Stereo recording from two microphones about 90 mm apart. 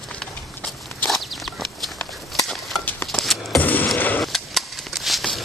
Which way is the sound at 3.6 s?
20° left (ahead or behind).